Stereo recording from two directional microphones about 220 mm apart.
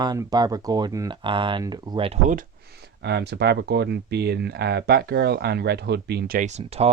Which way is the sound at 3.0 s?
50° right (ahead or behind).